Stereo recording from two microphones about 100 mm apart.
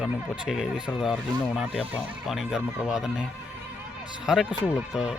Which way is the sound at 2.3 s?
5° right (ahead or behind).